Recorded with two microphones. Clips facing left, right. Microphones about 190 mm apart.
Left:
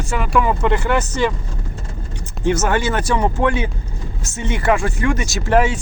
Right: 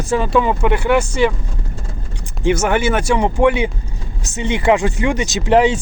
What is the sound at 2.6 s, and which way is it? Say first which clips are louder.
Speech: right 2 dB; 15° right (ahead or behind).